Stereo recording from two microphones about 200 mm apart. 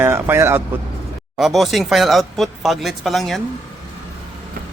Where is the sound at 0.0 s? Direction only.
10° right (ahead or behind).